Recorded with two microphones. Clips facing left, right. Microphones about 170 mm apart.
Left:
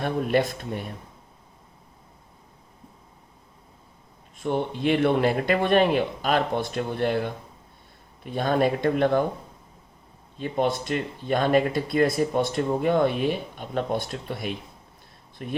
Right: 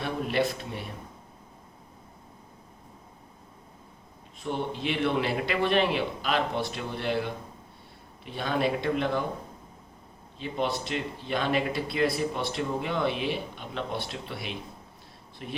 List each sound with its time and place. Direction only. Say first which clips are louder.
0.0 s speech: left 4 dB; 50° left (ahead or behind)
4.4 s speech: left 6 dB; 50° left (ahead or behind)
10.3 s speech: left 5 dB; 50° left (ahead or behind)